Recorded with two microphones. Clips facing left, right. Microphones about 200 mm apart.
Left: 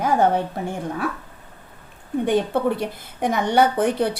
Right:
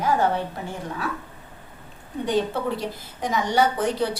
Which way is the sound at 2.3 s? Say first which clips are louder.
Left 3 dB; 55° left (ahead or behind).